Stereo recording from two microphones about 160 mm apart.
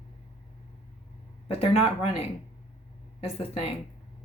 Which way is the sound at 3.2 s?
35° left (ahead or behind).